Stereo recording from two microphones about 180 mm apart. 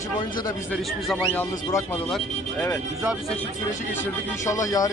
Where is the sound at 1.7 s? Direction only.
15° left (ahead or behind).